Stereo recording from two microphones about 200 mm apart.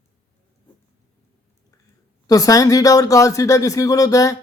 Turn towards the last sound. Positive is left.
turn(degrees=15)  # may be behind; listen again after turning